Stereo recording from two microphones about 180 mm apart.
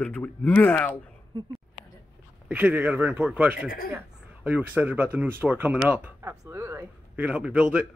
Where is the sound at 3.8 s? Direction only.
10° right (ahead or behind).